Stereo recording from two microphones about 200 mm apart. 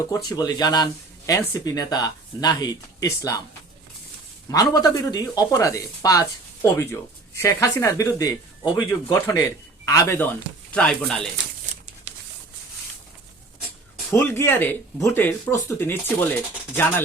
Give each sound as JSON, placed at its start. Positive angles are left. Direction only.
{"t": 0.3, "sound": "speech", "side_deg": 20}
{"t": 4.4, "sound": "speech", "side_deg": 15}
{"t": 10.7, "sound": "speech", "side_deg": 5}
{"t": 14.1, "sound": "speech", "side_deg": 10}